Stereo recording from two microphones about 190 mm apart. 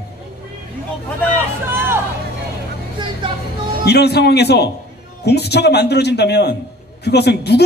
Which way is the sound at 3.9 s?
60° left (ahead or behind).